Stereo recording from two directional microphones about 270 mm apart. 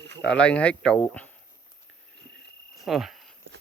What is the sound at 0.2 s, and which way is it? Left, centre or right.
Speech, centre.